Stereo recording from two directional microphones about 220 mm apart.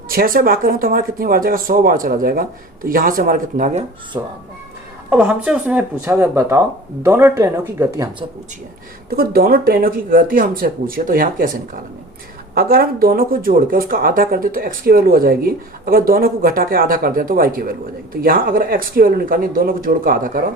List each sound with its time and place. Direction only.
0.1 s speech: 40° right (ahead or behind)
4.1 s speech: 15° right (ahead or behind)
9.0 s speech: 45° right (ahead or behind)